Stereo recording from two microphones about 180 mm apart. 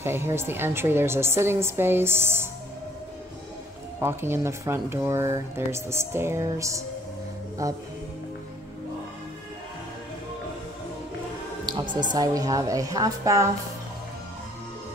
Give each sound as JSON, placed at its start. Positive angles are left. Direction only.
{"t": 0.0, "sound": "speech", "side_deg": -15}
{"t": 4.0, "sound": "speech", "side_deg": -15}
{"t": 11.6, "sound": "music", "side_deg": -25}
{"t": 12.1, "sound": "a woman's voice", "side_deg": -20}